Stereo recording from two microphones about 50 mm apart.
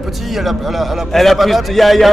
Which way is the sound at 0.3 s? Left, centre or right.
Centre.